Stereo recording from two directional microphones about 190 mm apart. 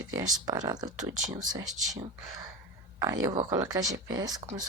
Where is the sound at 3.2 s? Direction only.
20° right (ahead or behind).